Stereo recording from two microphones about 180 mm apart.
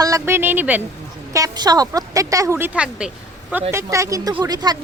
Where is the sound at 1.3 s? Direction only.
20° right (ahead or behind).